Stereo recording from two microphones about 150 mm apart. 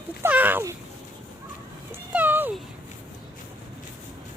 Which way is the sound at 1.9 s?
10° right (ahead or behind).